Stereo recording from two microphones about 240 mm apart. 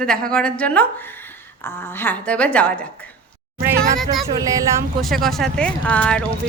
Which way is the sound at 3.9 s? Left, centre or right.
Centre.